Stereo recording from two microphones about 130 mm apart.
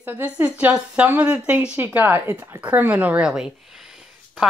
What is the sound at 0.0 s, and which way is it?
A woman's voice, 15° right (ahead or behind).